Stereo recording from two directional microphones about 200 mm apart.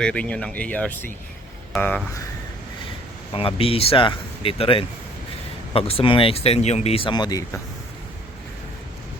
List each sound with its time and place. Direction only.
0.0 s speech: 5° left (ahead or behind)
3.3 s speech: 30° left (ahead or behind)